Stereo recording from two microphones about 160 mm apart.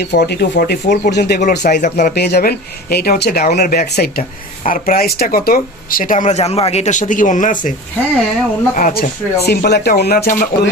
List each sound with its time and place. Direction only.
0.0 s speech: 90° left
1.4 s speech: 70° left (ahead or behind)
4.6 s speech: 60° left (ahead or behind)
8.7 s speech: 65° left (ahead or behind)